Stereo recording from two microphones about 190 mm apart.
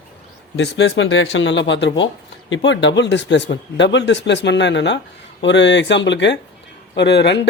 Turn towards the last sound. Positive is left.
turn(degrees=65)  # may be behind; listen again after turning